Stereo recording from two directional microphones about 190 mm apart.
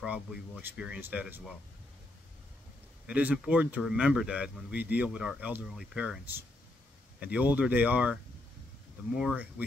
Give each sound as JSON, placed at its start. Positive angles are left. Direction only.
{"t": 0.0, "sound": "speech", "side_deg": -5}
{"t": 3.1, "sound": "speech", "side_deg": -5}